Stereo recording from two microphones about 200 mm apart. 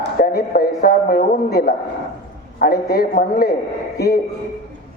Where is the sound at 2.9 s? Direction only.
50° left (ahead or behind).